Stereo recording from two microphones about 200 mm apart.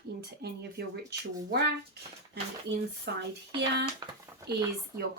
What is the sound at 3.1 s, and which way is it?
Speech, 55° right (ahead or behind).